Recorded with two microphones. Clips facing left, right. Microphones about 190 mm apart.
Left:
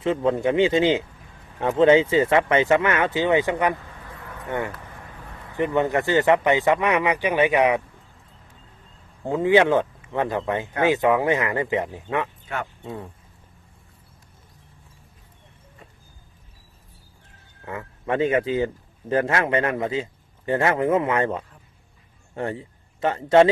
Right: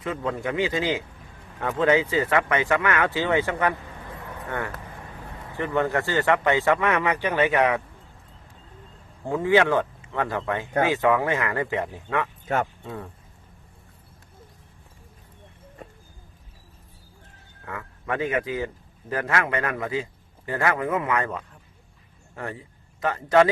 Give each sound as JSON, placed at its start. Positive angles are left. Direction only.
{"t": 0.0, "sound": "speech", "side_deg": 25}
{"t": 9.2, "sound": "speech", "side_deg": 20}
{"t": 12.5, "sound": "speech", "side_deg": -40}
{"t": 12.8, "sound": "speech", "side_deg": 20}
{"t": 17.7, "sound": "a man's voice", "side_deg": 25}